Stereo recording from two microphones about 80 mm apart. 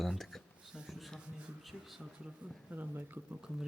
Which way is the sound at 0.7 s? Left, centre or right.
Centre.